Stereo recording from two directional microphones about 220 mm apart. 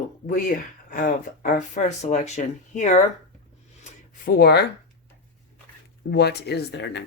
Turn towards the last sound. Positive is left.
turn(degrees=50)  # may be behind; listen again after turning